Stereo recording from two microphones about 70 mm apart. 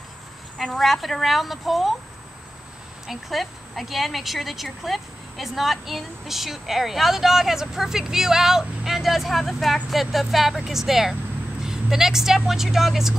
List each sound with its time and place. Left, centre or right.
0.6 s speech: centre
3.1 s speech: centre